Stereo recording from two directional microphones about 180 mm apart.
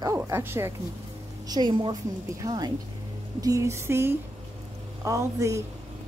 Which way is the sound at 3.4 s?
15° right (ahead or behind).